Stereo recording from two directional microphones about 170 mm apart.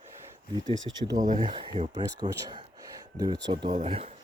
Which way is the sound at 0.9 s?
30° right (ahead or behind).